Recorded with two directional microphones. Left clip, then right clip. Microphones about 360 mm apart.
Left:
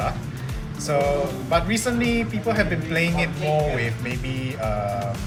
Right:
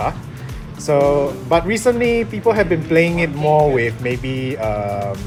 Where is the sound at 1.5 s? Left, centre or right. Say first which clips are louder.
Right 7 dB; centre.